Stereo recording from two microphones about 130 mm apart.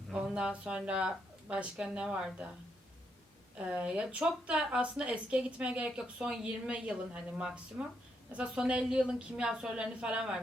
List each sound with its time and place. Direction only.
0.1 s a woman's voice: 5° right (ahead or behind)
3.7 s a woman's voice: 10° right (ahead or behind)